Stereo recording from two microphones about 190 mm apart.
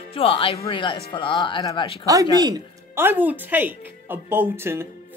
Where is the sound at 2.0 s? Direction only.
20° right (ahead or behind).